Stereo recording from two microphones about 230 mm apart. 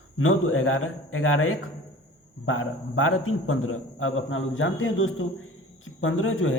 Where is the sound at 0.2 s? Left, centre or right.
Left.